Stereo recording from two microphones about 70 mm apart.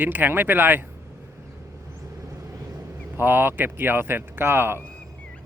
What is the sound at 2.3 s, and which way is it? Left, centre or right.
Speech, right.